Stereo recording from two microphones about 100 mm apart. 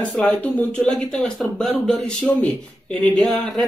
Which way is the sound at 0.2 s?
15° left (ahead or behind).